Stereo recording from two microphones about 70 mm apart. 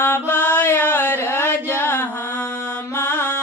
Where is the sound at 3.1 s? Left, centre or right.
Left.